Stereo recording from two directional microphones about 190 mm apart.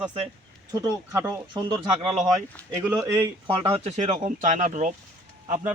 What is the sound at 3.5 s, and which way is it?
Speech, 30° right (ahead or behind).